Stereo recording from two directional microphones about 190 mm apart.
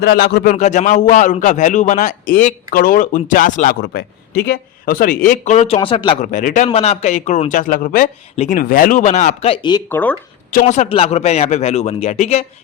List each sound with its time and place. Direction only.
0.0 s speech: 60° left (ahead or behind)
0.5 s a man's voice: 40° left (ahead or behind)
3.8 s a man's voice: 55° left (ahead or behind); by 6.2 s 30° left (ahead or behind)
6.2 s a man's voice: 45° left (ahead or behind); by 9.8 s 25° left (ahead or behind)
9.9 s speech: 10° left (ahead or behind)
10.5 s speech: 45° left (ahead or behind)